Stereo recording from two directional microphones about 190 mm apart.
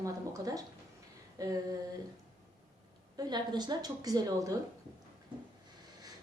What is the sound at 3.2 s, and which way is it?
A woman's voice, 20° right (ahead or behind).